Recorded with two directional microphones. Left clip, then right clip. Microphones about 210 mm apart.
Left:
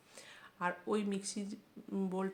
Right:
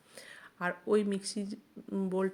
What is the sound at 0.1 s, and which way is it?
Speech, 20° right (ahead or behind).